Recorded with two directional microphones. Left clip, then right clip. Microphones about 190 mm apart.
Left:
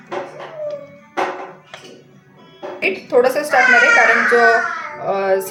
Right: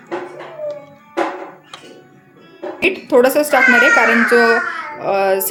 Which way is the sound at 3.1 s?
50° right (ahead or behind).